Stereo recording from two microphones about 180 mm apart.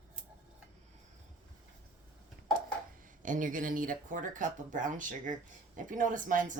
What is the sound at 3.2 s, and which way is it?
Speech, 45° right (ahead or behind).